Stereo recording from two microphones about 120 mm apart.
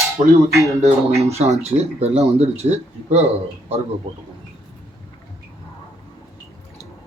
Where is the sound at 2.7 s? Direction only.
70° right (ahead or behind).